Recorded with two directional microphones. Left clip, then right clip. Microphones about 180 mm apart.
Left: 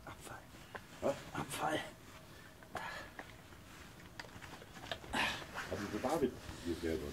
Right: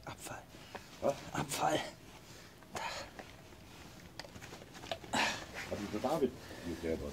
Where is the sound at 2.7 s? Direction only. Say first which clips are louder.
Right 3 dB; 45° right (ahead or behind).